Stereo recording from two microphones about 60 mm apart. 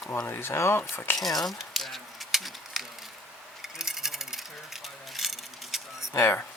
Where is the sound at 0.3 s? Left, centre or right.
Left.